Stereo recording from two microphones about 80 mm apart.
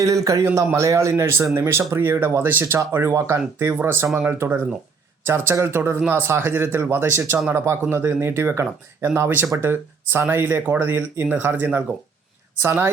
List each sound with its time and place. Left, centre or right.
0.0 s a man's voice: right
0.4 s speech: right